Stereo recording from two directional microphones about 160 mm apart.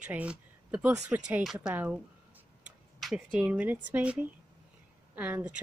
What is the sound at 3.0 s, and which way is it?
Speech, 5° right (ahead or behind).